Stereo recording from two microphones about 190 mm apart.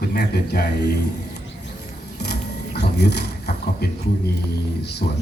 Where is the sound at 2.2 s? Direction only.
60° left (ahead or behind).